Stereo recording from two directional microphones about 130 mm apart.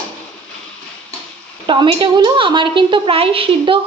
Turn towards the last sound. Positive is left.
turn(degrees=-45)  # may be behind; listen again after turning